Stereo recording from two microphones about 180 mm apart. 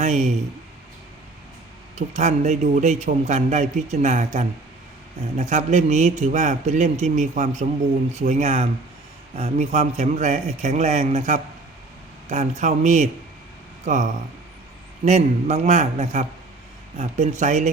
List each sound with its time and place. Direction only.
2.0 s a man's voice: 40° right (ahead or behind)